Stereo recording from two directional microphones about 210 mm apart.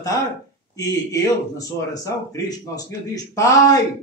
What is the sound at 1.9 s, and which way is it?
Speech, 15° left (ahead or behind).